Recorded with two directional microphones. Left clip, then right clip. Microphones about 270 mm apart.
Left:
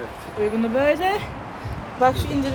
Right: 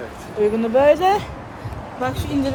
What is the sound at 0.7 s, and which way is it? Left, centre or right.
Speech, centre.